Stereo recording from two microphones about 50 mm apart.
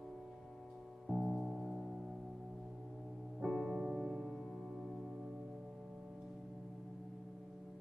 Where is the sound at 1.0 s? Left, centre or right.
Centre.